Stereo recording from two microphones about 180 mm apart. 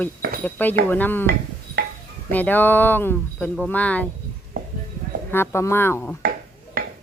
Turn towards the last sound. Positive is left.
turn(degrees=-60)  # may be behind; listen again after turning